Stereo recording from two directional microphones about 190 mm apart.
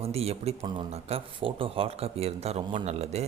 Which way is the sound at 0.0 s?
30° right (ahead or behind).